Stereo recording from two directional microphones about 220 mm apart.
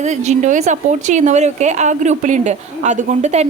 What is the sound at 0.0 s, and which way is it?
A woman's voice, 30° right (ahead or behind).